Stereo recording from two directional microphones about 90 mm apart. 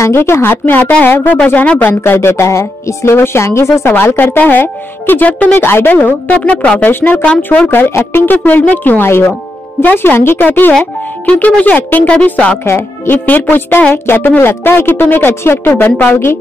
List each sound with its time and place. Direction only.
0.0 s speech: 30° left (ahead or behind)
12.6 s speech: 25° left (ahead or behind)